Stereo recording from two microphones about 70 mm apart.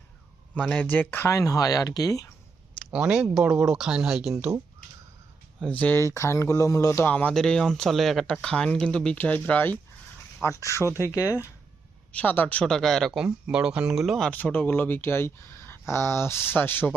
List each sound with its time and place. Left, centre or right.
0.7 s speech: left
1.3 s speech: left
2.9 s speech: centre
5.6 s speech: left
6.1 s speech: left
7.0 s speech: left
7.3 s speech: centre
8.3 s speech: centre
9.1 s speech: left
10.4 s speech: left
12.1 s speech: left
12.6 s speech: centre
13.1 s speech: centre
14.3 s speech: left